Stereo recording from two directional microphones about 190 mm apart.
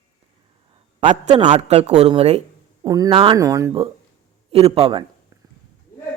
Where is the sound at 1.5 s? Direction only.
35° right (ahead or behind).